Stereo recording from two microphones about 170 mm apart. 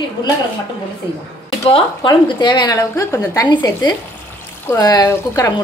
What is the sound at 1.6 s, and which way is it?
A woman's voice, 30° left (ahead or behind).